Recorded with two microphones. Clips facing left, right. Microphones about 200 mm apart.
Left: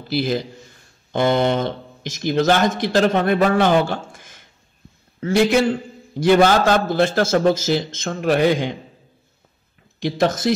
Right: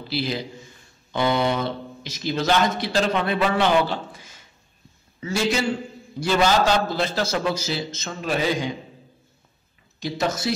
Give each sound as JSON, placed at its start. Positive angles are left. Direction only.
{"t": 0.1, "sound": "a man's voice", "side_deg": 50}
{"t": 5.2, "sound": "a man's voice", "side_deg": 60}
{"t": 10.0, "sound": "a man's voice", "side_deg": 50}